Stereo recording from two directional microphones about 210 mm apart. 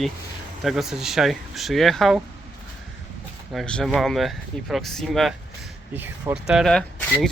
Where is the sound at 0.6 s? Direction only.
Centre (ahead or behind).